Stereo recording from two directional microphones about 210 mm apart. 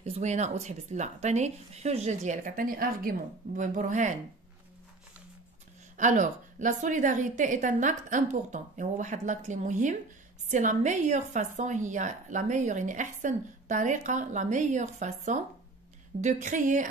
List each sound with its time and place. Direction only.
0.0 s a woman's voice: 30° right (ahead or behind)
5.9 s a woman's voice: 35° right (ahead or behind)